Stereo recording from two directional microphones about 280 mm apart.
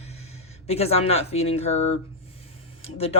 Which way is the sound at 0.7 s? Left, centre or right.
Left.